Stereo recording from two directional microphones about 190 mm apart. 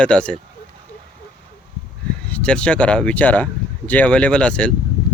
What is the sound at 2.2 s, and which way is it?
Speech, 5° left (ahead or behind).